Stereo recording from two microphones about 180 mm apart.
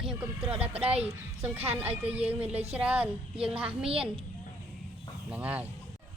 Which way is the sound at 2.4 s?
35° right (ahead or behind).